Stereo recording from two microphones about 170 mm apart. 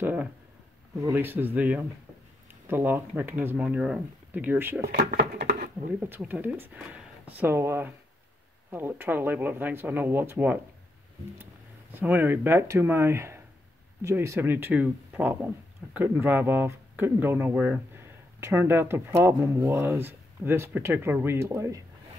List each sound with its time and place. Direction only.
0.0 s speech: 10° right (ahead or behind)
4.8 s speech: 65° right (ahead or behind)
5.9 s speech: 10° right (ahead or behind)
11.9 s speech: 10° right (ahead or behind)